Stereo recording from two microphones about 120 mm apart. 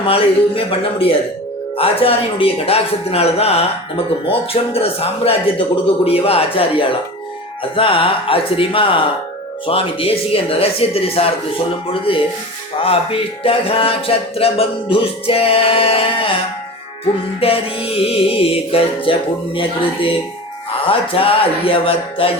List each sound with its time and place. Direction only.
0.0 s a man's voice: 50° left (ahead or behind)
17.4 s a man's voice: 55° left (ahead or behind)